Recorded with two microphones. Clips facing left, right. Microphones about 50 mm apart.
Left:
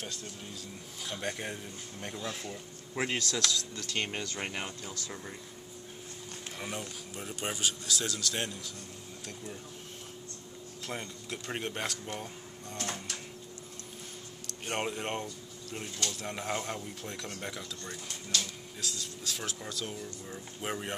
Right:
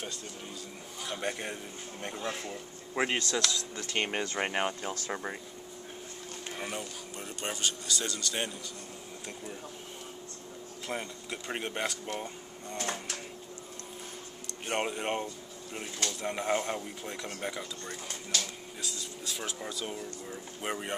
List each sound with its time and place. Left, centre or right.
1.0 s speech: centre
2.1 s speech: right
2.9 s speech: right
6.5 s speech: centre
10.9 s speech: centre
14.7 s speech: centre